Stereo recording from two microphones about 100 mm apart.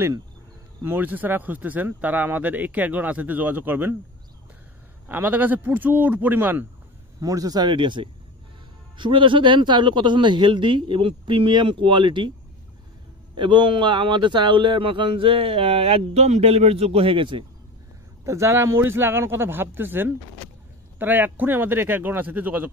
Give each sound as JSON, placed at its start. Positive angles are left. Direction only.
{"t": 0.8, "sound": "speech", "side_deg": -20}
{"t": 5.0, "sound": "speech", "side_deg": -20}
{"t": 7.2, "sound": "a man's voice", "side_deg": -35}
{"t": 13.3, "sound": "a man's voice", "side_deg": -50}
{"t": 18.2, "sound": "speech", "side_deg": -30}